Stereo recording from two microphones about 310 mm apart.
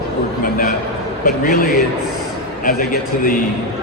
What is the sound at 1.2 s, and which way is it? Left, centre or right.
A man's voice, left.